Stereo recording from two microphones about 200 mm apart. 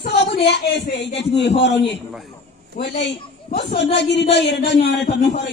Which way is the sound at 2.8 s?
60° left (ahead or behind).